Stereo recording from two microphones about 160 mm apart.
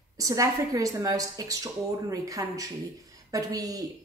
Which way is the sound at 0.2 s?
20° right (ahead or behind).